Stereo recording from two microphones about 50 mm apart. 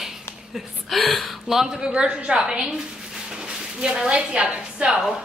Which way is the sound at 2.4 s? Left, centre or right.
Centre.